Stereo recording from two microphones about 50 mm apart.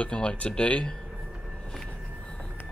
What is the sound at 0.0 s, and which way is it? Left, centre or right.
Speech, centre.